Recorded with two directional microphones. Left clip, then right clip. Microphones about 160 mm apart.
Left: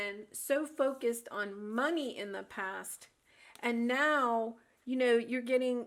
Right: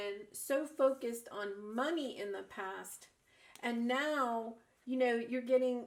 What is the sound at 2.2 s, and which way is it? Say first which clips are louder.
A woman's voice: left 2 dB; 35° left (ahead or behind).